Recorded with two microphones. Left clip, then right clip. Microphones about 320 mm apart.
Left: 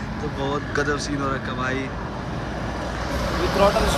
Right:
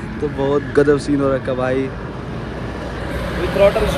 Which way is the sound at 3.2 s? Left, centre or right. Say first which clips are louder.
Right 2 dB; left.